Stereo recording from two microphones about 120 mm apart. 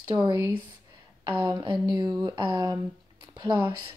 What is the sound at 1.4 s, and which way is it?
Speech, 40° right (ahead or behind).